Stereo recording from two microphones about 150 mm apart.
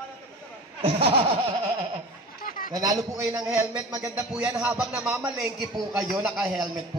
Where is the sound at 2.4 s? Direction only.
75° left (ahead or behind).